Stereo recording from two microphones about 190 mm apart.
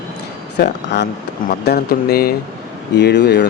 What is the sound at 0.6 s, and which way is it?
Speech, 65° left (ahead or behind).